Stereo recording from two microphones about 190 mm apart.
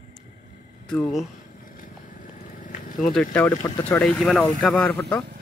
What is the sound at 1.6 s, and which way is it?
Vehicle, 45° left (ahead or behind).